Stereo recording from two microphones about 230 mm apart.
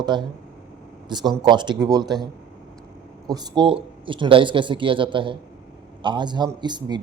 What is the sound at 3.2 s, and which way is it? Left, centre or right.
Speech, centre.